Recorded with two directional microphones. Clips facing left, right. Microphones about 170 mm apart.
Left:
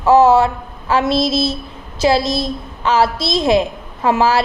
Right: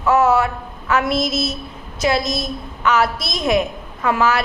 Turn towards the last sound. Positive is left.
turn(degrees=30)  # may be behind; listen again after turning